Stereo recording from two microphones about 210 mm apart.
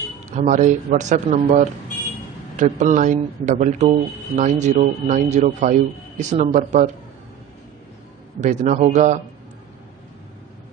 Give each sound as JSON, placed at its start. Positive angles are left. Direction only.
{"t": 0.4, "sound": "a man's voice", "side_deg": -35}
{"t": 8.4, "sound": "a man's voice", "side_deg": -35}